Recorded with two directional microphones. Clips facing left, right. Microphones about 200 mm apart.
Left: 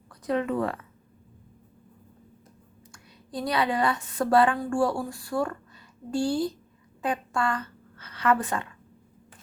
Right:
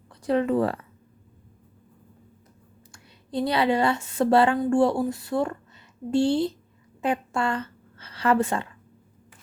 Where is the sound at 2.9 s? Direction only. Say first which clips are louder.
Right 6 dB; 25° right (ahead or behind).